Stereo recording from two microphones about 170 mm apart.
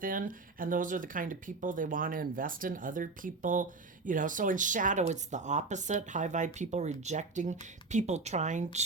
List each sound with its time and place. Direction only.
0.0 s speech: 55° right (ahead or behind)